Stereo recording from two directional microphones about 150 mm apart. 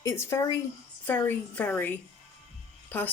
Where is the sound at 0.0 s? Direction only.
20° left (ahead or behind).